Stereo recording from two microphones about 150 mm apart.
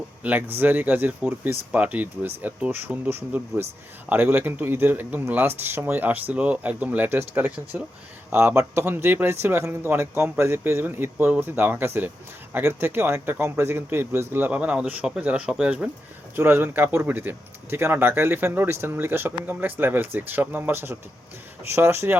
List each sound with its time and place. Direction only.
0.2 s speech: 10° right (ahead or behind)